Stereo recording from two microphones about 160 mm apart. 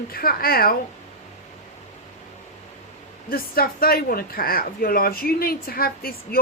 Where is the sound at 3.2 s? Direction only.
65° left (ahead or behind).